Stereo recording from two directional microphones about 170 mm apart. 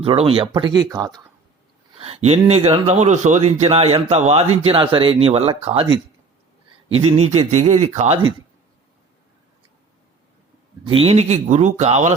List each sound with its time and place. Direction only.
0.0 s speech: 35° right (ahead or behind)
2.0 s a man's voice: 35° right (ahead or behind)
10.8 s a man's voice: 35° right (ahead or behind)